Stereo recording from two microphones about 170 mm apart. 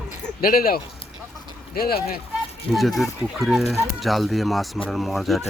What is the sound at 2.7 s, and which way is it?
Speech, centre (ahead or behind).